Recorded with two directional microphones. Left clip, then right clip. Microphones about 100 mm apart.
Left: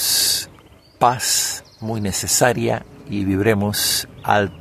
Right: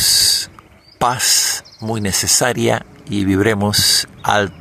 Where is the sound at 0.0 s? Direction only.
30° right (ahead or behind).